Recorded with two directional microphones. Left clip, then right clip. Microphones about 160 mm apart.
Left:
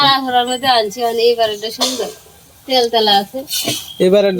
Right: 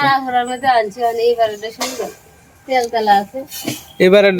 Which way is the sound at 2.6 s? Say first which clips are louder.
Left 2 dB; 15° left (ahead or behind).